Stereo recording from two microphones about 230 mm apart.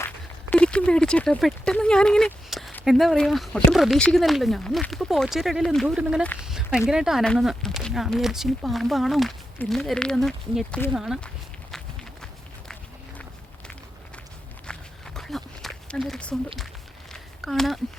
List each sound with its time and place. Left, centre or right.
0.5 s speech: centre
14.7 s walk: centre
17.1 s a sound: centre